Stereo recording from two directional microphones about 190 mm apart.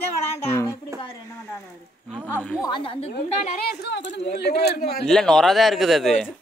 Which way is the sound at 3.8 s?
70° left (ahead or behind).